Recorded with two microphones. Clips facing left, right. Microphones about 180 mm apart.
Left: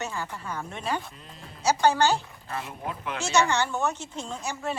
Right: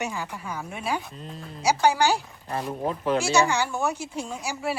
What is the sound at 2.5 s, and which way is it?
Speech, 35° right (ahead or behind).